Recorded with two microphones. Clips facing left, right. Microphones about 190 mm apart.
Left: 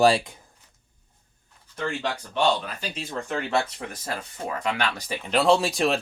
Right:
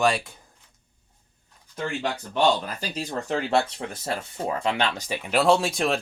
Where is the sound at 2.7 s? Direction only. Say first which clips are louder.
Right 2 dB; 40° right (ahead or behind); by 5.1 s 25° right (ahead or behind).